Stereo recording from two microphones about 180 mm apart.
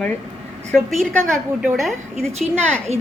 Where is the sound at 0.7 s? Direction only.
Centre (ahead or behind).